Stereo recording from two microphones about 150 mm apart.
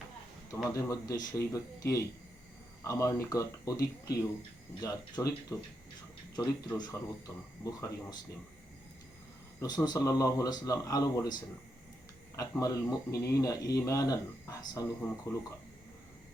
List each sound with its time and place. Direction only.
0.7 s speech: 20° left (ahead or behind)
9.6 s speech: 25° left (ahead or behind)